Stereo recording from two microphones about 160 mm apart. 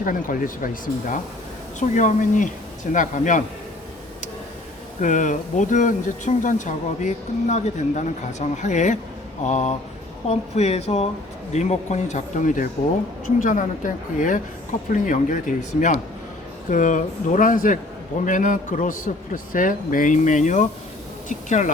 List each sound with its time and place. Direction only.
0.0 s a man's voice: 55° left (ahead or behind)
4.9 s a man's voice: 50° left (ahead or behind)